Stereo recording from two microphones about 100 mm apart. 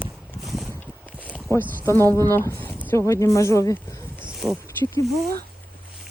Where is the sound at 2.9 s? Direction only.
30° left (ahead or behind).